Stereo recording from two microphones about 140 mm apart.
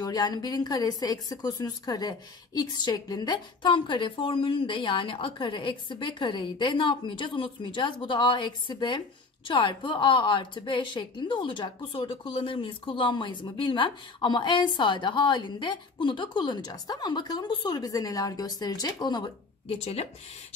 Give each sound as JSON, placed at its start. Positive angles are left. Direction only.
{"t": 0.0, "sound": "a woman's voice", "side_deg": 30}
{"t": 19.7, "sound": "speech", "side_deg": 45}